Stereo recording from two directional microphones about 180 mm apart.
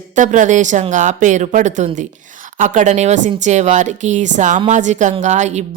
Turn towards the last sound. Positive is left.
turn(degrees=-40)  # may be behind; listen again after turning